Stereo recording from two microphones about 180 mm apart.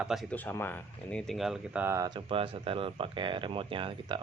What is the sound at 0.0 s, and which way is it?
Speech, centre (ahead or behind).